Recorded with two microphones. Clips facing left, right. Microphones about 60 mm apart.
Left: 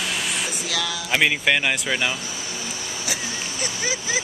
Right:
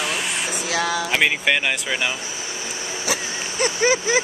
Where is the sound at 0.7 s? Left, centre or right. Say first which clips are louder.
Right 7 dB; right.